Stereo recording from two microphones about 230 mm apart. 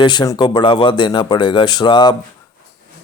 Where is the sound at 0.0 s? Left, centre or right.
Centre.